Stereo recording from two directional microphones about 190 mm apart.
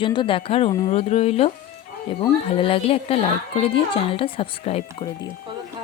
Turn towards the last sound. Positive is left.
turn(degrees=30)  # may be behind; listen again after turning